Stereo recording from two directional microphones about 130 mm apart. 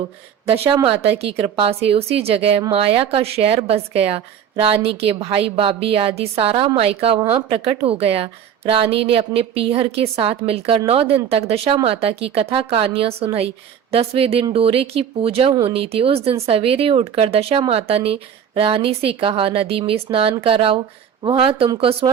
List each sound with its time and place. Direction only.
1.2 s speech: 50° right (ahead or behind)